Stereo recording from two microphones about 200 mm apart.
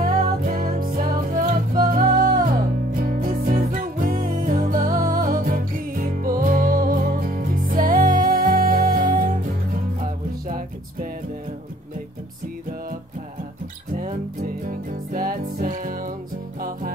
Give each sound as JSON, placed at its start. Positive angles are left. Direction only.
{"t": 0.0, "sound": "music", "side_deg": -45}
{"t": 13.9, "sound": "music", "side_deg": -45}